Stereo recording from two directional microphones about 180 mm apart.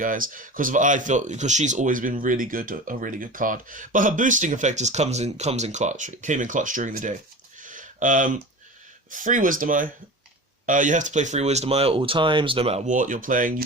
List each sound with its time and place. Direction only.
0.0 s speech: 50° right (ahead or behind)
7.6 s a sound: 45° right (ahead or behind)
9.0 s speech: 45° right (ahead or behind)